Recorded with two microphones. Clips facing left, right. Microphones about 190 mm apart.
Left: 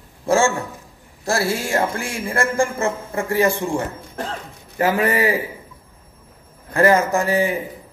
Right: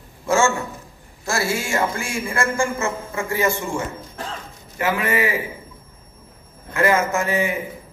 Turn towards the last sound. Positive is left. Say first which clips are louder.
# left 3 dB
turn(degrees=35)  # may be behind; listen again after turning